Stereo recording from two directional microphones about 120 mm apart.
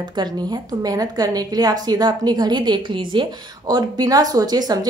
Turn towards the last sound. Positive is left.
turn(degrees=-35)  # may be behind; listen again after turning